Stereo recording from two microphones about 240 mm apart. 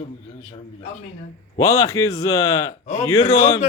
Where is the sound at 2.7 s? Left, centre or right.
Left.